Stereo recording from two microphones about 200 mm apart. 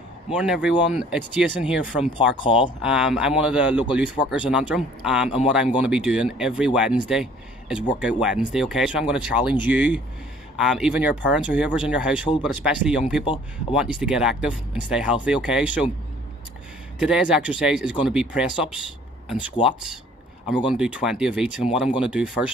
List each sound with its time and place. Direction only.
0.3 s speech: 5° right (ahead or behind)
2.3 s speech: 25° left (ahead or behind)
2.8 s speech: 5° right (ahead or behind)
13.2 s speech: 25° left (ahead or behind)
13.7 s speech: 5° right (ahead or behind)
17.0 s speech: 5° right (ahead or behind)